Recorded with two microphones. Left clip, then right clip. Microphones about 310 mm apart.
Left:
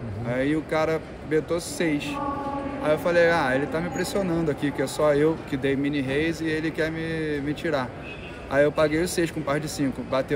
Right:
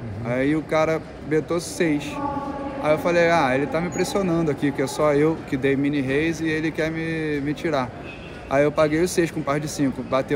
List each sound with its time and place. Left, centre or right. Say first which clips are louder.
0.3 s speech: right 3 dB; centre